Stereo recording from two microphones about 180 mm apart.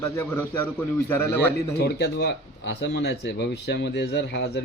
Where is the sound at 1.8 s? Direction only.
65° left (ahead or behind).